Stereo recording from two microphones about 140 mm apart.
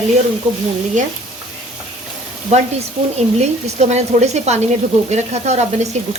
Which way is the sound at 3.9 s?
50° right (ahead or behind).